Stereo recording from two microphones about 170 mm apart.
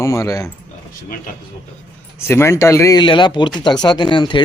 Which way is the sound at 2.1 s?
15° left (ahead or behind).